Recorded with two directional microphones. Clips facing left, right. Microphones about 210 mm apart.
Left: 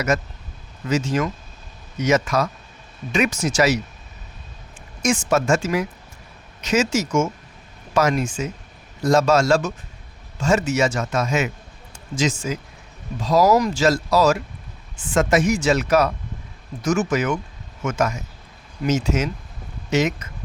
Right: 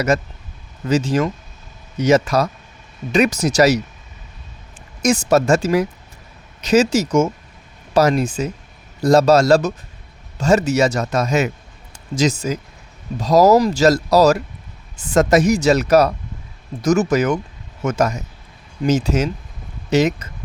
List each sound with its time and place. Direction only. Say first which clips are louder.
0.1 s speech: right 3 dB; 35° right (ahead or behind)
5.0 s speech: right 4 dB; 35° right (ahead or behind)